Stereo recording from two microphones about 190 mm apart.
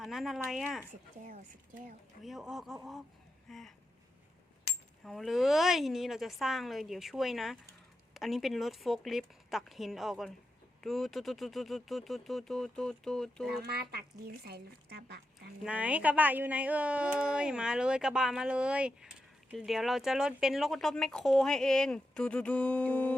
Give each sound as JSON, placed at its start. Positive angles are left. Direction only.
{"t": 0.0, "sound": "speech", "side_deg": 0}
{"t": 1.2, "sound": "speech", "side_deg": -40}
{"t": 2.2, "sound": "speech", "side_deg": 0}
{"t": 5.0, "sound": "speech", "side_deg": 0}
{"t": 13.6, "sound": "speech", "side_deg": -55}
{"t": 15.6, "sound": "speech", "side_deg": -5}